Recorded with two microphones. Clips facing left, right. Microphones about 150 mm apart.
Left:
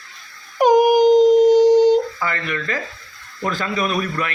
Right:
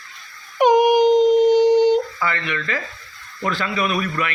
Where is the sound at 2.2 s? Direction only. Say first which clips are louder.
Even; 45° left (ahead or behind).